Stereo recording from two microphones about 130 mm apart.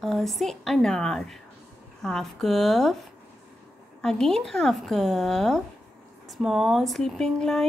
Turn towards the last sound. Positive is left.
turn(degrees=5)  # may be behind; listen again after turning